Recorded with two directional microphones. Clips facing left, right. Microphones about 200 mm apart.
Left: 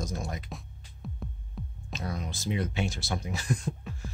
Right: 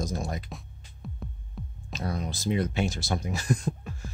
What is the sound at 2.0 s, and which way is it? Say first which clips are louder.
Speech: right 4 dB; 35° right (ahead or behind).